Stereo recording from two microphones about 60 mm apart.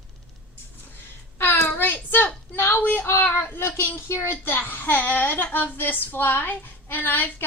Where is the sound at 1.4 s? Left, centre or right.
Left.